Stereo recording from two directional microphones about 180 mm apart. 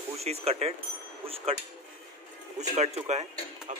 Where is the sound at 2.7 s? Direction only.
35° right (ahead or behind).